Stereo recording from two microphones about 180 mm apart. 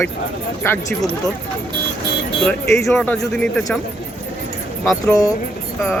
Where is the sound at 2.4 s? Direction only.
15° left (ahead or behind).